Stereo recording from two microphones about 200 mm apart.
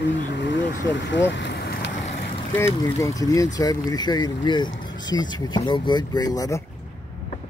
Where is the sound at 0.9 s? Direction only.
65° left (ahead or behind).